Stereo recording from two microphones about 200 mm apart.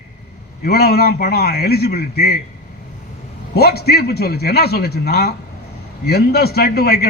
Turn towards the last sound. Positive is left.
turn(degrees=50)  # may be behind; listen again after turning